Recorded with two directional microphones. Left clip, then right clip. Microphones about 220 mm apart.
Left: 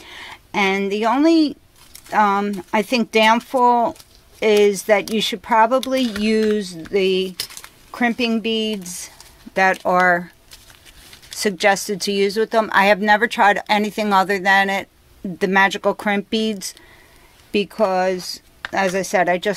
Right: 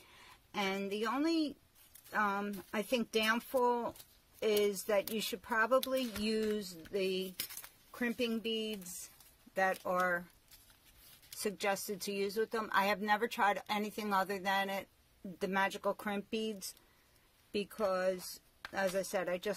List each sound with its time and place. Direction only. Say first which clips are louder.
0.5 s speech: left 18 dB; 25° left (ahead or behind)
11.4 s speech: left 19 dB; 30° left (ahead or behind)